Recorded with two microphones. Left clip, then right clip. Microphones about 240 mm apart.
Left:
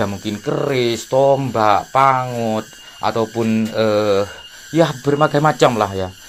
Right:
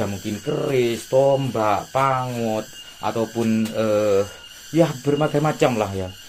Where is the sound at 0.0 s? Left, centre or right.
Left.